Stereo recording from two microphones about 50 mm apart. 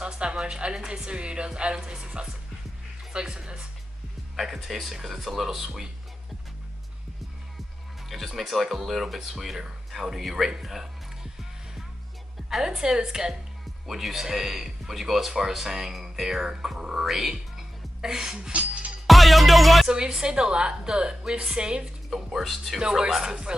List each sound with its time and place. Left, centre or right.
0.0 s music: right
0.4 s a man's voice: centre
8.1 s speech: centre
12.4 s a man's voice: centre
19.0 s music: centre
19.9 s a man's voice: centre
22.1 s speech: centre
22.8 s a man's voice: centre